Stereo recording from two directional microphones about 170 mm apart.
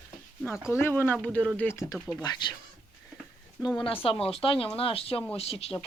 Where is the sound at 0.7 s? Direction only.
15° left (ahead or behind).